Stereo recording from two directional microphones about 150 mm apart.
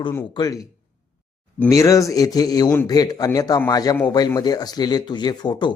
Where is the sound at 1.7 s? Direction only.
20° left (ahead or behind).